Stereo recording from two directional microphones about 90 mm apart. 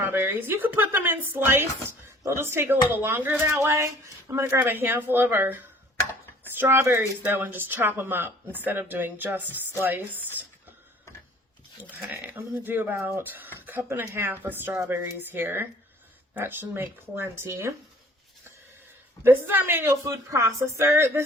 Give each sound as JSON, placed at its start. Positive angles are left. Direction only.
{"t": 0.0, "sound": "speech", "side_deg": -25}
{"t": 11.8, "sound": "speech", "side_deg": -20}
{"t": 13.2, "sound": "speech", "side_deg": -20}
{"t": 19.2, "sound": "speech", "side_deg": -25}